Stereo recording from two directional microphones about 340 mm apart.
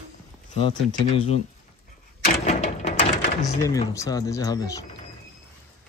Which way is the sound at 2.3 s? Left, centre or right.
Centre.